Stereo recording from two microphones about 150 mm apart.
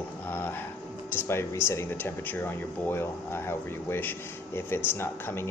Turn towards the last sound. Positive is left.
turn(degrees=15)  # may be behind; listen again after turning